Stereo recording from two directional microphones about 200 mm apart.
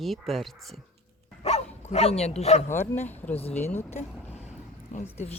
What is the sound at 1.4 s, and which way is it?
Speech, 35° left (ahead or behind).